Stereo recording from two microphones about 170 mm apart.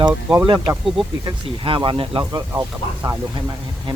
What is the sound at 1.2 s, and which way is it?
Speech, 30° right (ahead or behind).